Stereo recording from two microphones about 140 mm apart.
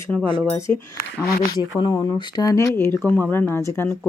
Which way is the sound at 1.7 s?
30° left (ahead or behind).